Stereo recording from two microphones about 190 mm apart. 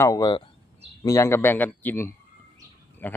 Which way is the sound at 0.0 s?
20° left (ahead or behind).